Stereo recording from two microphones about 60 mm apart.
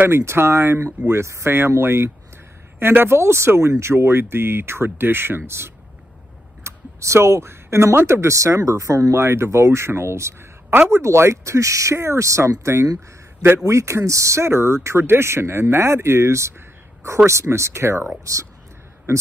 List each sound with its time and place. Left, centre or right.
0.0 s speech: right
6.6 s speech: right
9.2 s speech: right
18.2 s speech: right